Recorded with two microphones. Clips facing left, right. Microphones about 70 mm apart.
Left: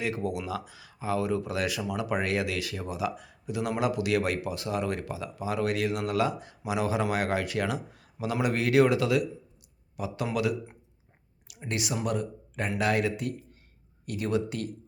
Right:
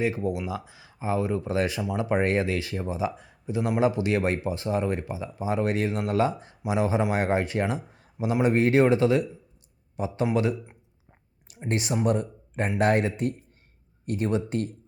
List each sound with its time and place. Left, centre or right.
0.0 s speech: right
10.2 s speech: right